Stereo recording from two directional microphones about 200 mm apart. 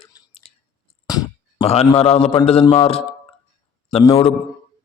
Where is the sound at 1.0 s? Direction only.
20° left (ahead or behind).